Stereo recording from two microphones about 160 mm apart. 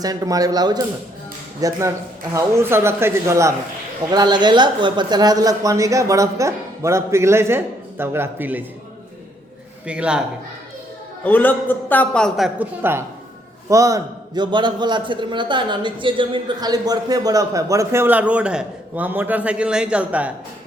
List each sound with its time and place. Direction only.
0.0 s a man's voice: 20° right (ahead or behind)
9.8 s a man's voice: 5° right (ahead or behind)
11.2 s a man's voice: 10° left (ahead or behind)
12.5 s a man's voice: 15° right (ahead or behind)